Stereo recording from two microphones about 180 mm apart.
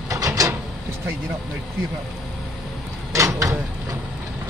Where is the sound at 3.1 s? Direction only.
15° right (ahead or behind).